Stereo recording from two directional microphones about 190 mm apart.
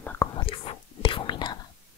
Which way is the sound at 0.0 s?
10° left (ahead or behind).